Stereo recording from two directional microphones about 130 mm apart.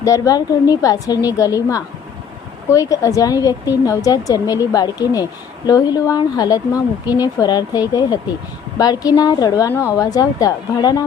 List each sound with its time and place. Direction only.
0.0 s speech: 25° left (ahead or behind)